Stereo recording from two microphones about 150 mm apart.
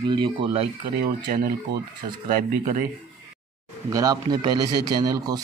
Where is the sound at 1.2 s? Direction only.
85° right.